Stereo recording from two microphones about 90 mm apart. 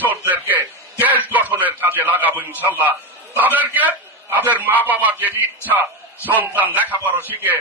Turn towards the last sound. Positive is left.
turn(degrees=-20)  # may be behind; listen again after turning